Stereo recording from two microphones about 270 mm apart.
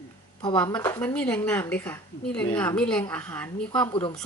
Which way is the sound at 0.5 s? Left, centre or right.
Centre.